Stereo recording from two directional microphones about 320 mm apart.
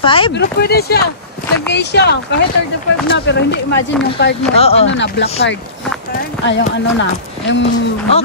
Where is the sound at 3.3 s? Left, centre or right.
Left.